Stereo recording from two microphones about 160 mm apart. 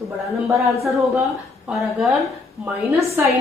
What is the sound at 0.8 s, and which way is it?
A woman's voice, centre (ahead or behind).